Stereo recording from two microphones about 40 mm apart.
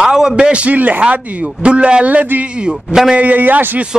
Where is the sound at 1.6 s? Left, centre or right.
Right.